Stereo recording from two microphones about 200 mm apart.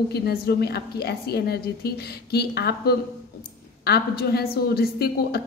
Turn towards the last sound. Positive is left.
turn(degrees=50)  # may be behind; listen again after turning